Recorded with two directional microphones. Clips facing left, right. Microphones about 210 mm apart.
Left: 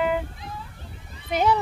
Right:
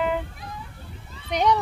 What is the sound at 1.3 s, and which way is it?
Speech, 5° left (ahead or behind).